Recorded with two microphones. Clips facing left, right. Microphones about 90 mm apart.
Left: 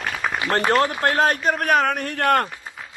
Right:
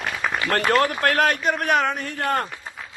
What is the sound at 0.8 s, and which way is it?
Speech, 25° left (ahead or behind).